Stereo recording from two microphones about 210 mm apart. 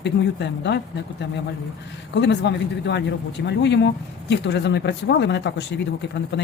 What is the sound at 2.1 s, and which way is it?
Speech, 55° left (ahead or behind).